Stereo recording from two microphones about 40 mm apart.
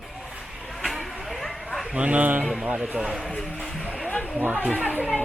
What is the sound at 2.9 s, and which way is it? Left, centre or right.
Speech, centre.